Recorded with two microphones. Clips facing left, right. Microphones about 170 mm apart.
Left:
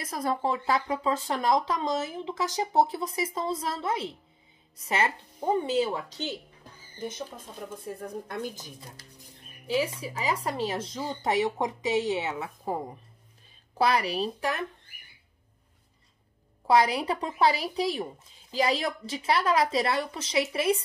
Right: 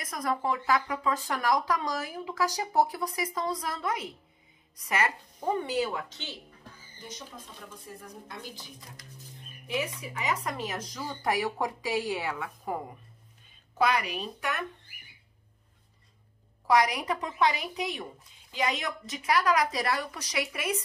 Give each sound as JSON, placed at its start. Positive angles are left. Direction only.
{"t": 0.0, "sound": "speech", "side_deg": 30}
{"t": 8.3, "sound": "speech", "side_deg": 50}
{"t": 8.7, "sound": "a woman's voice", "side_deg": 30}
{"t": 16.6, "sound": "a woman's voice", "side_deg": 30}